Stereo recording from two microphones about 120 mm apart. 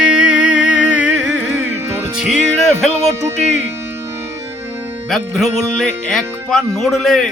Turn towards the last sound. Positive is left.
turn(degrees=0)  # may be behind; listen again after turning